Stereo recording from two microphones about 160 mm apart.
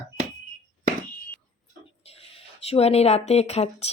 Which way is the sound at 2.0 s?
40° left (ahead or behind).